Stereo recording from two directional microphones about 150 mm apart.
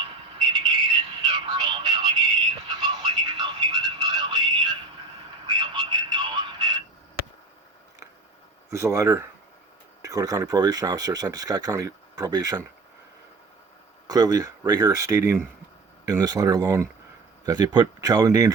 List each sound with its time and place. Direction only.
0.3 s music: 30° right (ahead or behind)
5.5 s a sound: 30° right (ahead or behind)
8.7 s speech: 20° right (ahead or behind)
14.1 s speech: 25° right (ahead or behind)